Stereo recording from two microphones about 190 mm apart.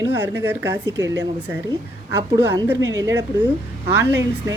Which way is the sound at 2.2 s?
20° right (ahead or behind).